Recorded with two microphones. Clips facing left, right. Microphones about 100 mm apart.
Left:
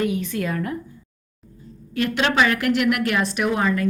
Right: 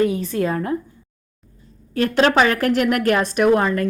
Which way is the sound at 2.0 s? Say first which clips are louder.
Right 4 dB; 40° right (ahead or behind).